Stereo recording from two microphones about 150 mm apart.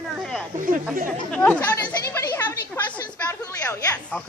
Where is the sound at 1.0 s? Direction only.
65° right (ahead or behind).